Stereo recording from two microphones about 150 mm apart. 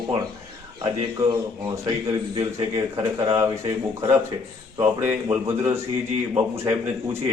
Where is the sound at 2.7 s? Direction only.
20° right (ahead or behind).